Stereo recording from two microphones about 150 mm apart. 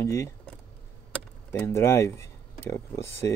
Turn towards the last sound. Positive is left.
turn(degrees=20)  # may be behind; listen again after turning